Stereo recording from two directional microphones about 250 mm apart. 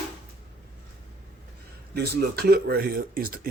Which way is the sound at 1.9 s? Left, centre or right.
Right.